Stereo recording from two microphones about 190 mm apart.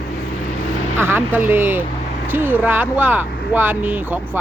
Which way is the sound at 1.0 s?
10° right (ahead or behind).